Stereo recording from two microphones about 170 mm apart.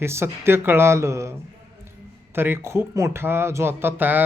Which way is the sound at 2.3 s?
15° right (ahead or behind).